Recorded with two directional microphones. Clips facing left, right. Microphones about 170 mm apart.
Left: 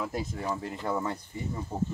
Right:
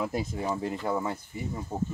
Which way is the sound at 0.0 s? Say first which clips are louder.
Right 3 dB; 15° right (ahead or behind).